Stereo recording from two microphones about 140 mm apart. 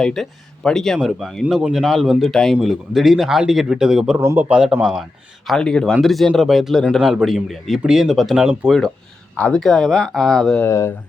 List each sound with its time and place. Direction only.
0.0 s speech: 5° left (ahead or behind)
4.2 s speech: 15° right (ahead or behind); by 10.7 s 5° left (ahead or behind)
10.7 s speech: 20° left (ahead or behind)